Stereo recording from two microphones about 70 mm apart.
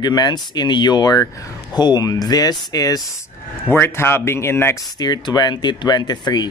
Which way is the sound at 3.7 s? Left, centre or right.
Left.